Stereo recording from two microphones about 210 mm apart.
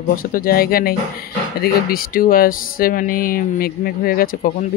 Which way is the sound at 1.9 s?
45° left (ahead or behind).